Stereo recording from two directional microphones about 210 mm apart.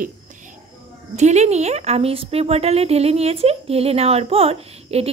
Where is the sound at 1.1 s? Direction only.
35° right (ahead or behind).